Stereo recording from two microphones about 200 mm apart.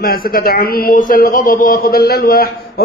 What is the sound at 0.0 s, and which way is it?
A man's voice, 50° left (ahead or behind).